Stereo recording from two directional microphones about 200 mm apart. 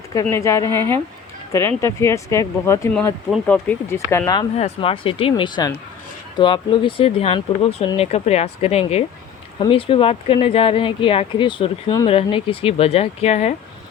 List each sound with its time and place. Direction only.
0.1 s speech: 15° left (ahead or behind)
3.2 s speech: centre (ahead or behind)
4.5 s speech: 30° left (ahead or behind)